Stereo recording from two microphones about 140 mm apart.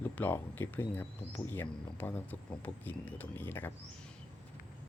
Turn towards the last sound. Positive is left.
turn(degrees=15)  # may be behind; listen again after turning